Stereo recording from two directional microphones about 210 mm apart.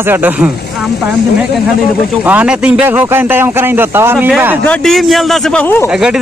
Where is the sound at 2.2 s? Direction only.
5° right (ahead or behind).